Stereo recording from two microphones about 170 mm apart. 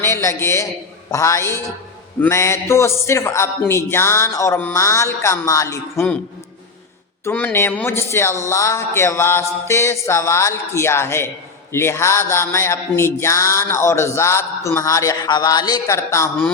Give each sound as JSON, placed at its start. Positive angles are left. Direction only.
{"t": 0.0, "sound": "speech", "side_deg": 15}
{"t": 7.3, "sound": "speech", "side_deg": 10}